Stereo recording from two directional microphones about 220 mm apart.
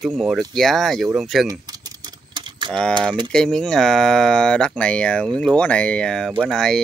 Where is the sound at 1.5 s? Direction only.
15° right (ahead or behind).